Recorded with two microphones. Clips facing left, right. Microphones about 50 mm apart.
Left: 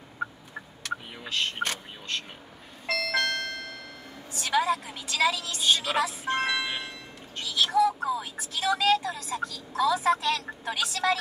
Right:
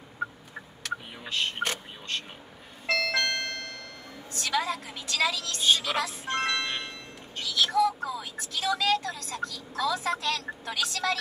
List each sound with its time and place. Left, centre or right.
0.2 s gobble: centre
1.2 s a sound: centre
2.9 s ice cream truck: centre
4.3 s speech: left; by 7.4 s centre
7.4 s speech: left